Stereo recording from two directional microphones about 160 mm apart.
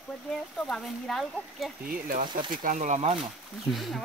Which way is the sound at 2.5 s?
55° right (ahead or behind).